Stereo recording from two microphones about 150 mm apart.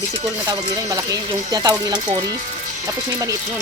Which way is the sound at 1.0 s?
25° right (ahead or behind).